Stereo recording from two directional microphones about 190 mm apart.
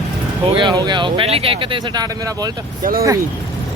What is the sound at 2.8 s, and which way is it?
Speech, 50° right (ahead or behind).